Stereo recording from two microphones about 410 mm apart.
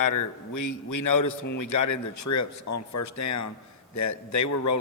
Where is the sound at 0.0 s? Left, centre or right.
Left.